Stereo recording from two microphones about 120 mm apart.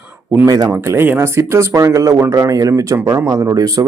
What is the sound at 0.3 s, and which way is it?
Speech, 30° right (ahead or behind).